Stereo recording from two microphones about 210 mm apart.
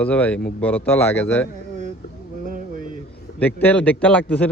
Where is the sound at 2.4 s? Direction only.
40° right (ahead or behind).